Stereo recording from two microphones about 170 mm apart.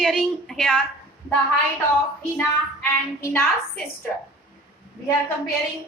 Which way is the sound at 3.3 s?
10° left (ahead or behind).